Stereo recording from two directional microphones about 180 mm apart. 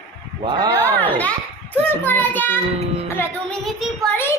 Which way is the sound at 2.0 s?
10° left (ahead or behind).